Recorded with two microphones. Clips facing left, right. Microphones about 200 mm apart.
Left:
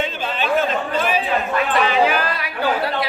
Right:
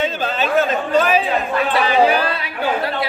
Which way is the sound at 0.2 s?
40° right (ahead or behind).